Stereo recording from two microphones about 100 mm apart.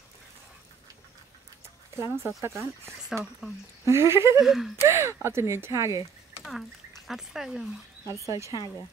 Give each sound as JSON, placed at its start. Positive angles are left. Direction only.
{"t": 2.0, "sound": "speech", "side_deg": -25}
{"t": 3.1, "sound": "speech", "side_deg": -5}
{"t": 3.8, "sound": "speech", "side_deg": -30}
{"t": 4.4, "sound": "speech", "side_deg": -5}
{"t": 4.8, "sound": "speech", "side_deg": -25}
{"t": 7.1, "sound": "speech", "side_deg": -5}
{"t": 8.1, "sound": "speech", "side_deg": -30}